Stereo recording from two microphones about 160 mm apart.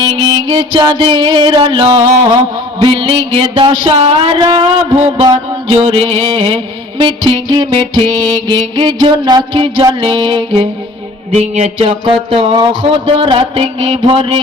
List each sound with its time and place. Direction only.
0.3 s music: 25° right (ahead or behind)
2.8 s speech: 35° right (ahead or behind)
7.0 s music: 30° right (ahead or behind)
11.3 s speech: 45° right (ahead or behind)